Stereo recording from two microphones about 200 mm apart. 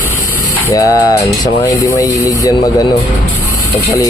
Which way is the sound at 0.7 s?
15° left (ahead or behind).